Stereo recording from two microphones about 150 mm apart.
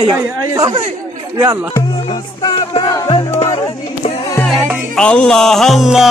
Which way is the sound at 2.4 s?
30° left (ahead or behind).